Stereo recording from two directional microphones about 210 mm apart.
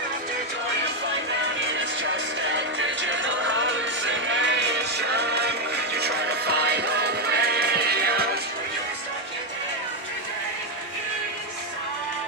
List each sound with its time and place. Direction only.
1.6 s music: 60° right (ahead or behind)